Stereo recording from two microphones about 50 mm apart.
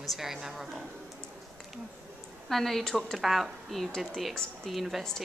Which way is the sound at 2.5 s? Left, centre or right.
Centre.